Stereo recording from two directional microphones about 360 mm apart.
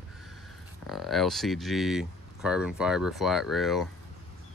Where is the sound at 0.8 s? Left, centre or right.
Centre.